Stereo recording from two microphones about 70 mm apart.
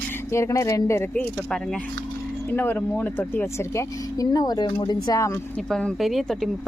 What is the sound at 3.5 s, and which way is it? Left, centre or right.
Speech, left.